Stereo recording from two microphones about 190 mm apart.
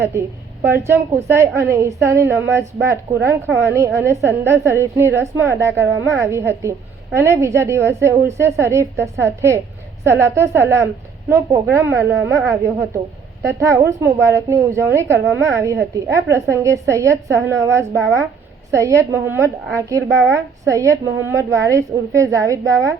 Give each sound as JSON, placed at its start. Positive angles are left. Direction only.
{"t": 0.0, "sound": "a woman's voice", "side_deg": -15}